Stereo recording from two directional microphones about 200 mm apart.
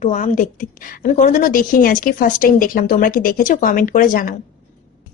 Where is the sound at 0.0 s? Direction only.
40° left (ahead or behind).